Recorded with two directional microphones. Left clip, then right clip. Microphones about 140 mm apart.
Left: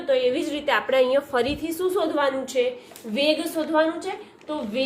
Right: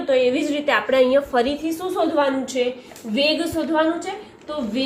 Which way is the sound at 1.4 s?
50° left (ahead or behind).